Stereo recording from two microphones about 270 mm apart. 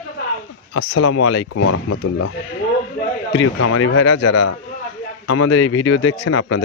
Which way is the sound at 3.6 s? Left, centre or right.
Left.